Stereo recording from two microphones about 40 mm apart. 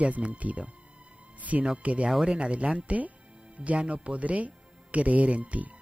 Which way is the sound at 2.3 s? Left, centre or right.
Right.